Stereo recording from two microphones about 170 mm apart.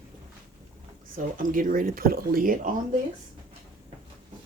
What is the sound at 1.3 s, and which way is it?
Speech, 55° right (ahead or behind).